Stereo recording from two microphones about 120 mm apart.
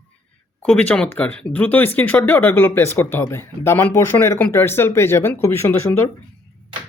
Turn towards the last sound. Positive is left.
turn(degrees=25)  # may be behind; listen again after turning